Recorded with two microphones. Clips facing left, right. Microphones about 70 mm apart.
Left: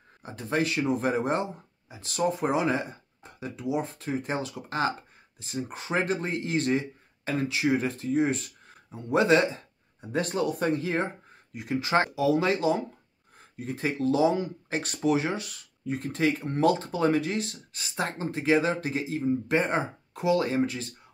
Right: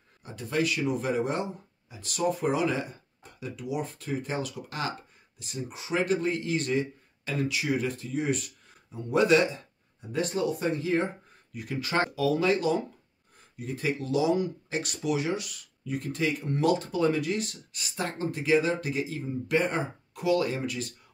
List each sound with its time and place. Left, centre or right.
0.2 s speech: left
10.1 s speech: left
11.5 s speech: left